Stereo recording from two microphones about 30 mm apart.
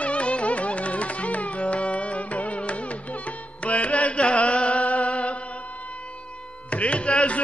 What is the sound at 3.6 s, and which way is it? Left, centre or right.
Music, left.